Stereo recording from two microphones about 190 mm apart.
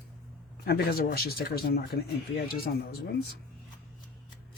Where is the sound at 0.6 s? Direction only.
55° left (ahead or behind).